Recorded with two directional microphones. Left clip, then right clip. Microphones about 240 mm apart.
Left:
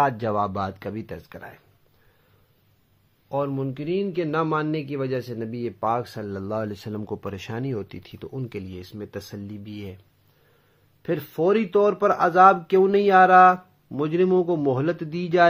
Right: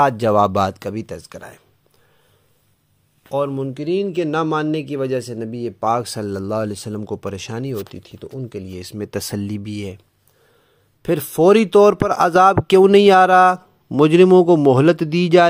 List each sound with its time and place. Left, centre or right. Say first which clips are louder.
0.0 s speech: right 8 dB; right
3.3 s speech: right 5 dB; right; by 8.6 s centre
8.6 s speech: right 8 dB; right
11.0 s speech: right 8 dB; right